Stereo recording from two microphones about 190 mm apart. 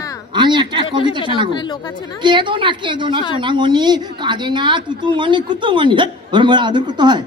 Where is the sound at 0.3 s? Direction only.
25° right (ahead or behind).